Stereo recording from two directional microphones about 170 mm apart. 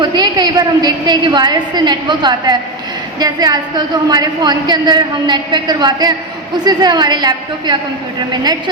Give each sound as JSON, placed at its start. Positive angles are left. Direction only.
{"t": 0.0, "sound": "a woman's voice", "side_deg": -25}